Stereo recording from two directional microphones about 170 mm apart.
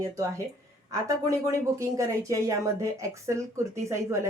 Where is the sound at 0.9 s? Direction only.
20° right (ahead or behind).